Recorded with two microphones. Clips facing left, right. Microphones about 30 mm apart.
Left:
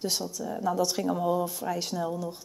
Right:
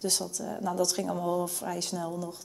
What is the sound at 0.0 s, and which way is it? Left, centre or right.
Speech, centre.